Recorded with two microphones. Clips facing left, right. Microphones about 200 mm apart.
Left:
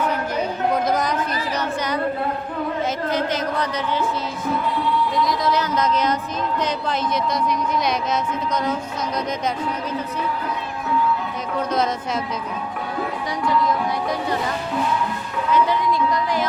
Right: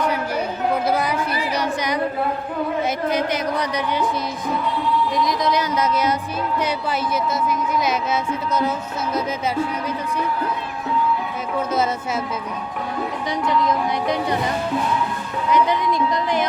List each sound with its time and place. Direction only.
0.0 s a sound: 10° right (ahead or behind)
0.9 s speech: 10° right (ahead or behind)
3.1 s speech: 10° right (ahead or behind)
5.1 s speech: 20° right (ahead or behind)
7.4 s speech: 5° right (ahead or behind)
11.7 s speech: 5° right (ahead or behind)
15.5 s a sound: 20° right (ahead or behind)